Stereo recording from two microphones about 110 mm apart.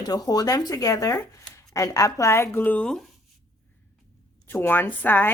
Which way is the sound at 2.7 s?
5° left (ahead or behind).